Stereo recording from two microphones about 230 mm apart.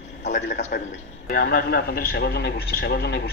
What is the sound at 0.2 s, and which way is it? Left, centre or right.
A man's voice, left.